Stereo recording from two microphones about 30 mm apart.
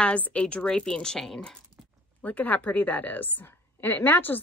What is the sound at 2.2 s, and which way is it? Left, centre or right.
Speech, left.